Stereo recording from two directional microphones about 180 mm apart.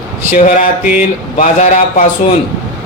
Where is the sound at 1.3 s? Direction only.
45° left (ahead or behind).